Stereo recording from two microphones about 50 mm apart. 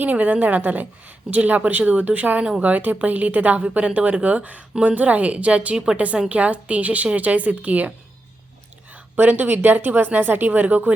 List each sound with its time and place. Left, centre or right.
0.0 s speech: right; by 6.0 s centre
6.2 s speech: right
9.1 s speech: right